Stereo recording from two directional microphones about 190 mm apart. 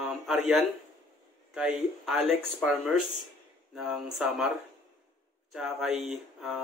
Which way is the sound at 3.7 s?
Centre (ahead or behind).